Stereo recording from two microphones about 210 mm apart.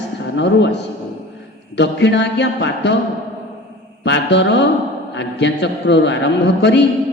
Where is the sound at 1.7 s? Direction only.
55° left (ahead or behind).